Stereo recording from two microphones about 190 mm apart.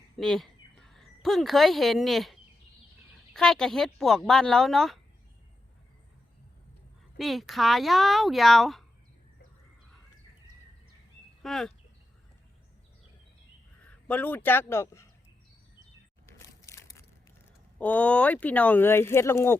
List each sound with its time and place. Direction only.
0.2 s speech: centre (ahead or behind)
7.2 s speech: centre (ahead or behind)
11.4 s speech: centre (ahead or behind)
13.8 s speech: 5° left (ahead or behind)
16.4 s crushing: 15° left (ahead or behind)
17.7 s speech: 10° left (ahead or behind)